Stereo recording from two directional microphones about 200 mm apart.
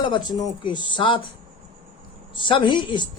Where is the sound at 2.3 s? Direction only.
25° left (ahead or behind).